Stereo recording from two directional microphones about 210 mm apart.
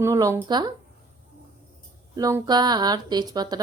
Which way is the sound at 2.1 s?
20° right (ahead or behind).